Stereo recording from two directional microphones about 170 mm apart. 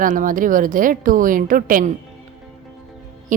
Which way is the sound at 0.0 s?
50° right (ahead or behind).